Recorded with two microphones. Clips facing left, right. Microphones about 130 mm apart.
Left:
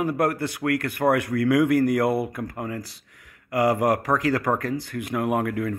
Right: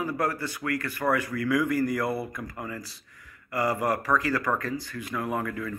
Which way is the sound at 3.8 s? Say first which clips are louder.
Left 4 dB; 65° left (ahead or behind).